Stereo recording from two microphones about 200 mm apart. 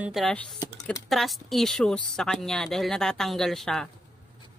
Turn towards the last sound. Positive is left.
turn(degrees=0)  # may be behind; listen again after turning